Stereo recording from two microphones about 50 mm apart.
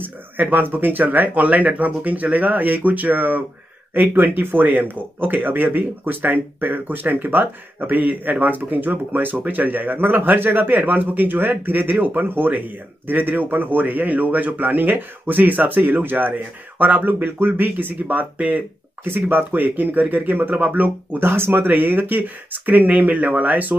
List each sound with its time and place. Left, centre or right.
0.0 s speech: right
19.0 s speech: right
21.2 s speech: right